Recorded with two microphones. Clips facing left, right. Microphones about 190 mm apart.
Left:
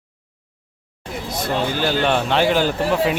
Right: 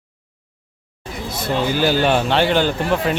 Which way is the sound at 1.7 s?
10° right (ahead or behind).